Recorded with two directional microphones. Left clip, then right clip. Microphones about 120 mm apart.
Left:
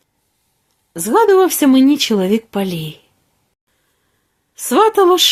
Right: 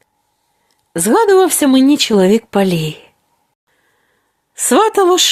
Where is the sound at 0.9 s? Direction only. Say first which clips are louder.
Right 1 dB; 45° right (ahead or behind).